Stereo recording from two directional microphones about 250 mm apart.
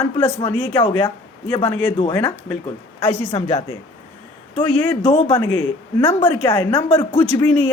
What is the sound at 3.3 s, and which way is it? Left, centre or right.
Speech, left.